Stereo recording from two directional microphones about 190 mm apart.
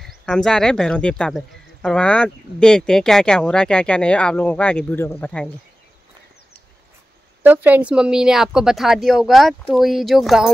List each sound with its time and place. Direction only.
0.0 s speech: centre (ahead or behind)
7.4 s speech: 10° right (ahead or behind)